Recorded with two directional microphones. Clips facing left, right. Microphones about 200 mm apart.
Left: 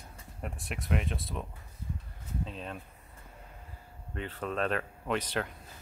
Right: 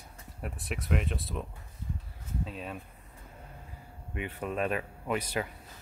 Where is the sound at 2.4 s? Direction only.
5° right (ahead or behind).